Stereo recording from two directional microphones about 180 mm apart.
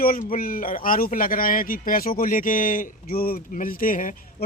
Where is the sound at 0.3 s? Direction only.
50° left (ahead or behind).